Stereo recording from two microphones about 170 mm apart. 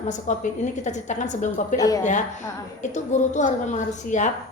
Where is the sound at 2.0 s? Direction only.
45° left (ahead or behind).